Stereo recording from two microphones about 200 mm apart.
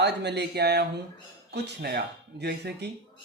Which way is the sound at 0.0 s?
60° right (ahead or behind).